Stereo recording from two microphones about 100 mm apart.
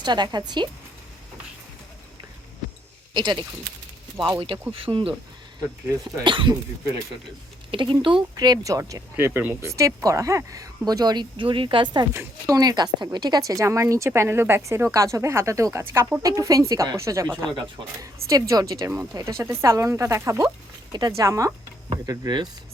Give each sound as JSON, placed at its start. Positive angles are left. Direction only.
{"t": 0.0, "sound": "a woman's voice", "side_deg": -45}
{"t": 3.2, "sound": "a woman's voice", "side_deg": -50}
{"t": 4.4, "sound": "speech", "side_deg": -60}
{"t": 6.2, "sound": "speech", "side_deg": -55}
{"t": 7.7, "sound": "speech", "side_deg": -55}
{"t": 9.1, "sound": "speech", "side_deg": -25}
{"t": 9.6, "sound": "speech", "side_deg": -30}
{"t": 12.5, "sound": "speech", "side_deg": -40}
{"t": 16.2, "sound": "speech", "side_deg": -35}
{"t": 17.4, "sound": "a woman's voice", "side_deg": -50}
{"t": 18.0, "sound": "speech", "side_deg": -35}